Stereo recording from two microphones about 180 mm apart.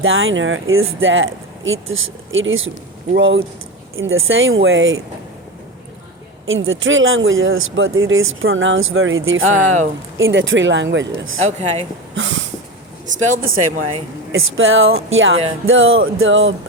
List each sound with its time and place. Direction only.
0.0 s speech: 90° right
6.5 s speech: 90° right
9.5 s speech: 45° right (ahead or behind)
10.2 s speech: 90° right
11.6 s speech: 35° right (ahead or behind)
12.1 s a sound: 85° right
13.1 s speech: 50° right (ahead or behind)
14.3 s speech: 90° right